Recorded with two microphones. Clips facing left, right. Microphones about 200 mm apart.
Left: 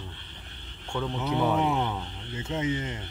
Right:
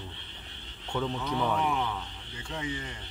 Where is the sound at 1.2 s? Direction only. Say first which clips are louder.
Left 6 dB; 15° left (ahead or behind).